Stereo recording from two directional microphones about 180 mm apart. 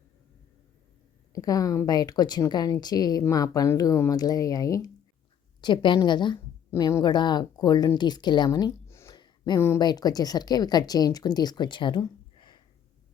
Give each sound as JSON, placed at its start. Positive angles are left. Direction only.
{"t": 1.3, "sound": "a woman's voice", "side_deg": 20}